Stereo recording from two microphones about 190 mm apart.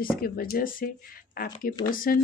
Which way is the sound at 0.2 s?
50° left (ahead or behind).